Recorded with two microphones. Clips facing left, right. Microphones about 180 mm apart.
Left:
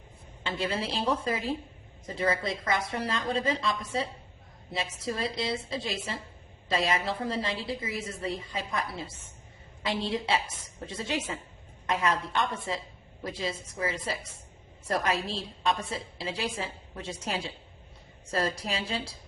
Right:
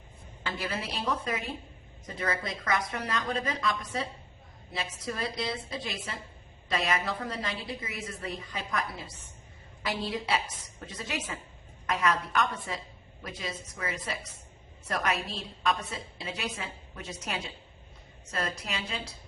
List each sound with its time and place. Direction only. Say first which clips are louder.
0.4 s a woman's voice: left 3 dB; 25° left (ahead or behind)